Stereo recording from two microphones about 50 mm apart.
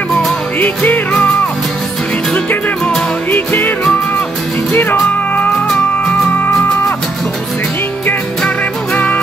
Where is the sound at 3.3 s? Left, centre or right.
Left.